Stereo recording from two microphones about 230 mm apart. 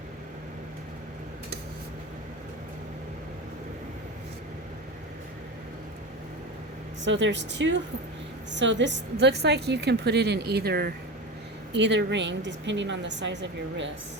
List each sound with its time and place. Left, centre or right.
7.0 s a woman's voice: right